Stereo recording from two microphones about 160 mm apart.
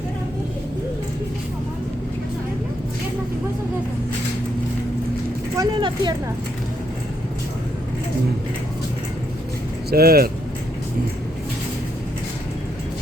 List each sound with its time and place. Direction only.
5.5 s vehicle: 25° right (ahead or behind)
9.9 s speech: 70° right (ahead or behind)